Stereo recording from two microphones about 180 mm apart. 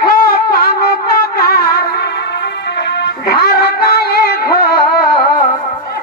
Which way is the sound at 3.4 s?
60° left (ahead or behind).